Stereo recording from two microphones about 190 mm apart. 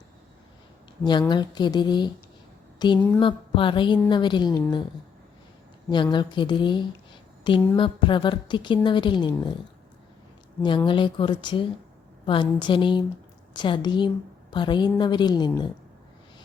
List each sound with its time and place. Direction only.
1.3 s a woman's voice: 25° left (ahead or behind)
5.9 s a woman's voice: 25° left (ahead or behind)
10.6 s a woman's voice: 25° left (ahead or behind)